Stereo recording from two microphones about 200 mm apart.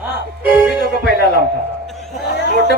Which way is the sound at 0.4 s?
10° right (ahead or behind).